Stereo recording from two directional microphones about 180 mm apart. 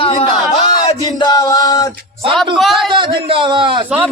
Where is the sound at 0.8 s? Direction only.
25° left (ahead or behind).